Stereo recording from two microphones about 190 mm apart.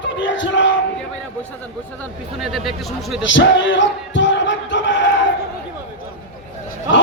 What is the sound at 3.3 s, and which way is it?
Battle cry, 75° left (ahead or behind).